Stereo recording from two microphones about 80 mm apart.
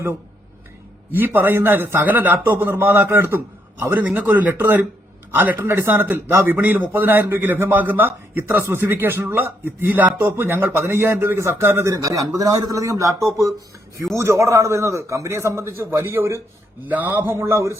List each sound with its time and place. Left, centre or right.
1.1 s a man's voice: right
11.9 s a man's voice: right
16.8 s a man's voice: right